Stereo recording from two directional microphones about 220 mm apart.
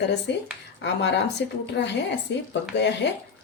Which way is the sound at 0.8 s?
50° left (ahead or behind).